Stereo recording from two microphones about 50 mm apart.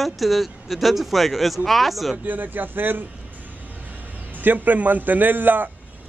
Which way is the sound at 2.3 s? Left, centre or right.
Right.